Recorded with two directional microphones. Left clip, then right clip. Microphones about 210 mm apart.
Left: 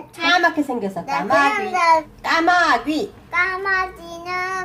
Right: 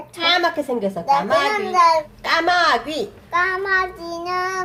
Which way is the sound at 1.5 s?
20° right (ahead or behind).